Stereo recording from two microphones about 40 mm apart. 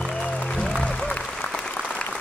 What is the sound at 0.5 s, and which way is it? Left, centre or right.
Applause, centre.